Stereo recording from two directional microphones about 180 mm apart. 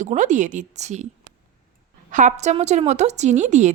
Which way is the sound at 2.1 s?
45° right (ahead or behind).